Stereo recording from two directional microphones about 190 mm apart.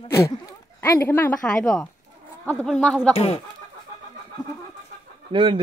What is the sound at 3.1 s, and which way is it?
Speech, 30° left (ahead or behind).